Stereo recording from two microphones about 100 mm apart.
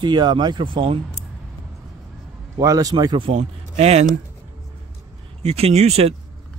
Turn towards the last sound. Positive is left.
turn(degrees=-90)